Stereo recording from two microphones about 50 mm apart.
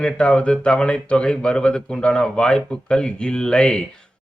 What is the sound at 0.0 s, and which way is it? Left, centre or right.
A man's voice, left.